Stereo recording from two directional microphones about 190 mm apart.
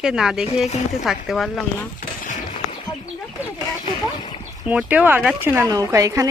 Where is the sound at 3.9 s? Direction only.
25° left (ahead or behind).